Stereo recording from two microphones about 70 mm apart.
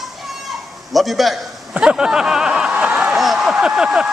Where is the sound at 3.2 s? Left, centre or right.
Centre.